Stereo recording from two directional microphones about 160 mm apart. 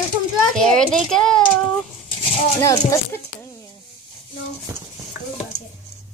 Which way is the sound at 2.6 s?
20° left (ahead or behind).